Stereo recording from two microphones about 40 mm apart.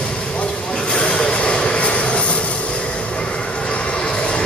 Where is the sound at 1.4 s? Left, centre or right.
Left.